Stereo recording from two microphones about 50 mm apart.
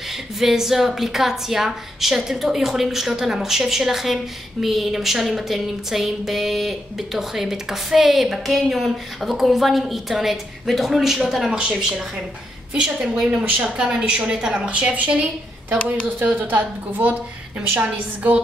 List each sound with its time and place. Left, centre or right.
0.1 s a woman's voice: centre
11.5 s a woman's voice: centre
16.2 s a woman's voice: right